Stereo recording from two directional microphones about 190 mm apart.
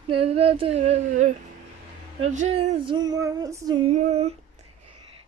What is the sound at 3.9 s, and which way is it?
Female singing, 35° right (ahead or behind).